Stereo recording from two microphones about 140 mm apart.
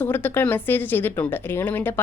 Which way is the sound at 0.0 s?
15° left (ahead or behind).